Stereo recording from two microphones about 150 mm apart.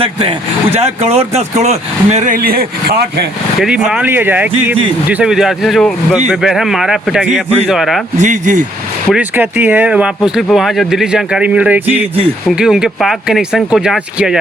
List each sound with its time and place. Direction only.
0.0 s speech: 40° right (ahead or behind); by 3.2 s 90° right
3.6 s speech: 5° right (ahead or behind)
8.2 s speech: 55° right (ahead or behind)
9.1 s speech: 15° right (ahead or behind)